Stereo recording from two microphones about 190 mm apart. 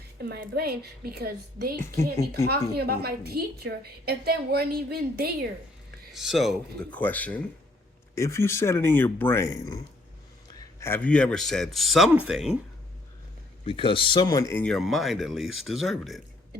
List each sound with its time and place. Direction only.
0.2 s a woman's voice: 55° right (ahead or behind)
6.1 s a man's voice: centre (ahead or behind)
13.7 s a man's voice: 30° left (ahead or behind); by 16.2 s centre (ahead or behind)